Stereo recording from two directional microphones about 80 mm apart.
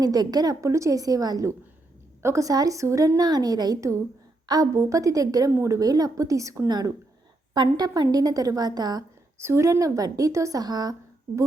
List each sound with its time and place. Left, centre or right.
0.0 s a woman's voice: right
4.7 s a woman's voice: right
6.7 s a woman's voice: right
8.1 s a woman's voice: right
9.4 s a woman's voice: right